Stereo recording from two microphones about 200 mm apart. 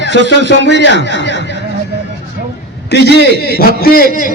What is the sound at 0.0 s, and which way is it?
Speech, 60° left (ahead or behind).